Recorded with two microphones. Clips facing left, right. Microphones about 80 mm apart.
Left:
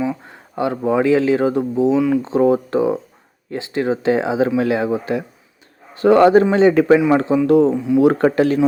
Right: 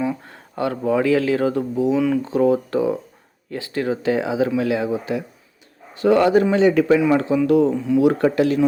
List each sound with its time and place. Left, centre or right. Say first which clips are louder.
0.3 s a sound: left 3 dB; centre
0.9 s speech: left 3 dB; left
2.0 s speech: left 3 dB; centre
2.2 s speech: left 2 dB; left
7.7 s speech: left 2 dB; centre
7.9 s speech: left 3 dB; left